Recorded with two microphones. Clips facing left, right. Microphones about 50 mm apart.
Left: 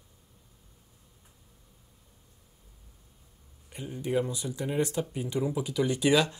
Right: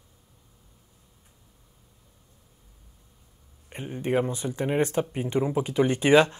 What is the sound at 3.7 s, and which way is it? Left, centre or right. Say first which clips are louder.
Speech: right 4 dB; right.